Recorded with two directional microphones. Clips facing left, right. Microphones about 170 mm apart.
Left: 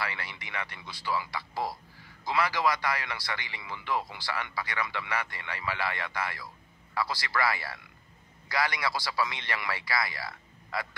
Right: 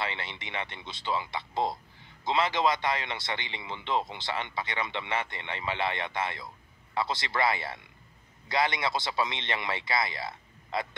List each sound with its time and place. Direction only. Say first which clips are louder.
0.0 s speech: right 2 dB; 25° right (ahead or behind)